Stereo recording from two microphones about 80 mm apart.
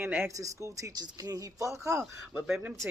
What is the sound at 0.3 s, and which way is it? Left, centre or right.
Speech, right.